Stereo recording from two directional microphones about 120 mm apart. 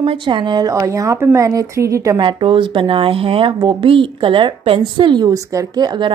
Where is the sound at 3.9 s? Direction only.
45° right (ahead or behind).